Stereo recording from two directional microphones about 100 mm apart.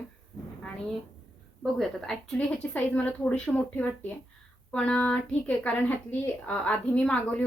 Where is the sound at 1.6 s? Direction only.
Centre (ahead or behind).